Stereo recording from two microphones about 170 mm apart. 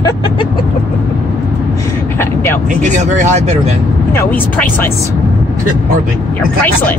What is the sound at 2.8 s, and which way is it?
Speech, 45° right (ahead or behind).